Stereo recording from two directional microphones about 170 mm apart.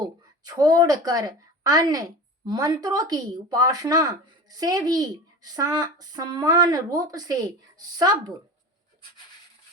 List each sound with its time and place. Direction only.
0.0 s a woman's voice: 20° right (ahead or behind)